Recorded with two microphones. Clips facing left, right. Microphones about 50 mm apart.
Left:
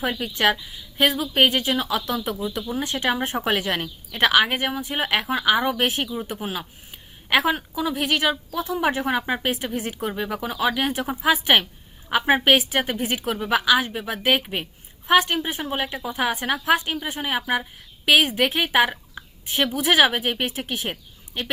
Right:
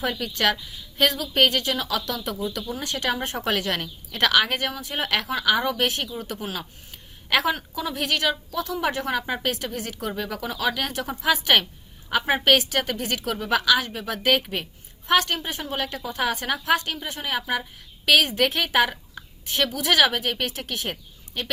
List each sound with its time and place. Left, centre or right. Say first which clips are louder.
0.0 s a woman's voice: left 2 dB; centre